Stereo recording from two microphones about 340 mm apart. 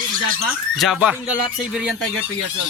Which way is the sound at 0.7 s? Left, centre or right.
Centre.